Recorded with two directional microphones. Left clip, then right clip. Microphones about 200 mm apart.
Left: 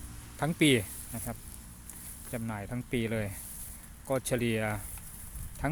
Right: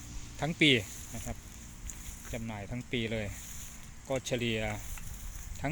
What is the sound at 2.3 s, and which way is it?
Speech, 15° left (ahead or behind).